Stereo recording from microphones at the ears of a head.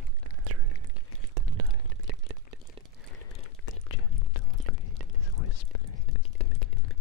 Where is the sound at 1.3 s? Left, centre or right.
Right.